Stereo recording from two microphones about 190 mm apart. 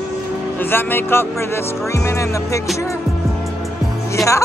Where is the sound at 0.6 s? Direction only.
10° left (ahead or behind).